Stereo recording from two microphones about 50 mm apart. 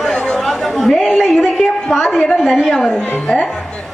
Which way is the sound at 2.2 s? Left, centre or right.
Centre.